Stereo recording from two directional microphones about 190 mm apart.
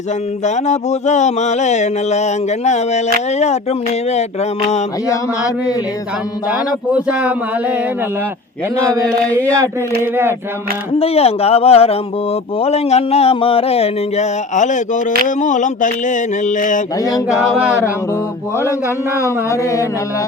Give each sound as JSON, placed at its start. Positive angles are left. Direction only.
{"t": 0.4, "sound": "speech", "side_deg": 40}
{"t": 5.0, "sound": "a man's voice", "side_deg": 15}
{"t": 6.9, "sound": "a sound", "side_deg": -5}
{"t": 9.0, "sound": "a man's voice", "side_deg": 5}
{"t": 9.6, "sound": "a sound", "side_deg": -10}
{"t": 10.9, "sound": "speech", "side_deg": 30}
{"t": 17.0, "sound": "a sound", "side_deg": 20}
{"t": 17.3, "sound": "speech", "side_deg": -5}
{"t": 18.5, "sound": "a man's voice", "side_deg": 15}